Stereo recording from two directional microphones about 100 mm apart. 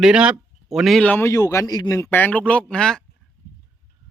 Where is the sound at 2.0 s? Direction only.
20° left (ahead or behind).